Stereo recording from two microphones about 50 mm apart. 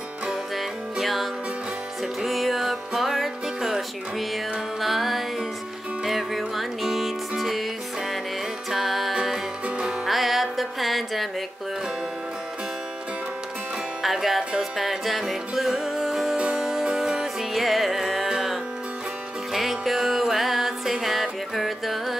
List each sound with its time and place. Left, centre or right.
0.6 s music: centre
8.6 s music: centre
14.0 s music: centre